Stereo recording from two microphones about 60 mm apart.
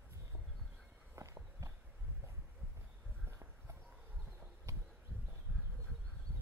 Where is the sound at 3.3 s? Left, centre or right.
Right.